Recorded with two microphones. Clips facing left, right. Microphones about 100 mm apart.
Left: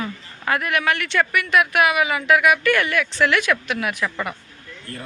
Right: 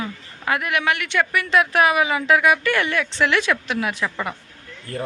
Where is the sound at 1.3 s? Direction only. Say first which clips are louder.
Right 1 dB; 25° right (ahead or behind).